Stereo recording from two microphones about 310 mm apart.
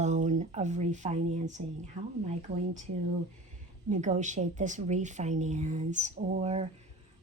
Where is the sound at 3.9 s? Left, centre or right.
Right.